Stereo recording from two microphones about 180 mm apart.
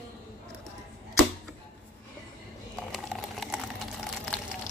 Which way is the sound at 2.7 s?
Centre (ahead or behind).